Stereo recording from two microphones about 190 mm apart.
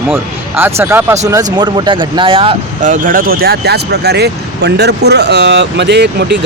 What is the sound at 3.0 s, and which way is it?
Speech, 50° right (ahead or behind).